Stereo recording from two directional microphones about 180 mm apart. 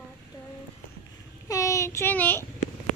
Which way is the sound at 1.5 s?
15° left (ahead or behind).